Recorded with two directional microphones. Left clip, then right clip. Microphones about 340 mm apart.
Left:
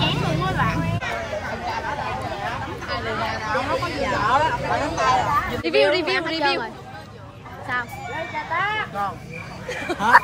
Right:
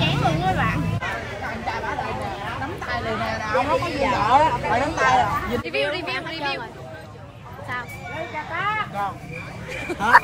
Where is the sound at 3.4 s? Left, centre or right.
Right.